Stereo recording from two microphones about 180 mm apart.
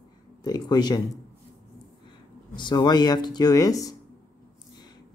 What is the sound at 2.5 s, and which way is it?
Speech, 25° left (ahead or behind).